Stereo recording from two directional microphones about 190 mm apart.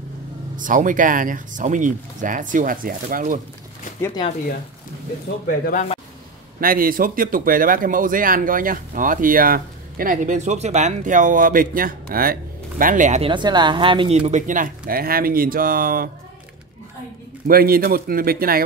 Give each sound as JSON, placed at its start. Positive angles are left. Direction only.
{"t": 0.6, "sound": "speech", "side_deg": -45}
{"t": 4.0, "sound": "speech", "side_deg": 20}
{"t": 6.6, "sound": "speech", "side_deg": -50}
{"t": 13.3, "sound": "speech", "side_deg": -25}
{"t": 17.5, "sound": "speech", "side_deg": -50}